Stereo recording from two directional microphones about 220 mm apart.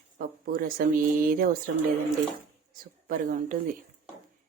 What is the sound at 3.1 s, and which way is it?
Speech, 40° right (ahead or behind).